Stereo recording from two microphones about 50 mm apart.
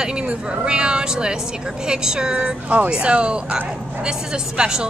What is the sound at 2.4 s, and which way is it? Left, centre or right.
Speech, right.